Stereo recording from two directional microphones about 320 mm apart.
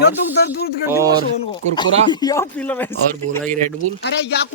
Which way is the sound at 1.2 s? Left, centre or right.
Centre.